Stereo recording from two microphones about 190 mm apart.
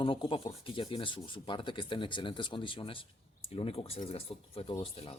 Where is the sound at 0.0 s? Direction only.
25° left (ahead or behind).